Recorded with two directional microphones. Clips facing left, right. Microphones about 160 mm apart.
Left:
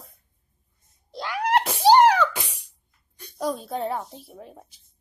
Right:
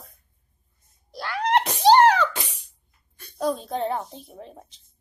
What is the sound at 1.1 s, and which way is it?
Wail, 15° left (ahead or behind).